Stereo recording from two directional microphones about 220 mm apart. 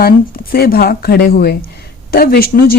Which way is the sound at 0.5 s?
45° left (ahead or behind).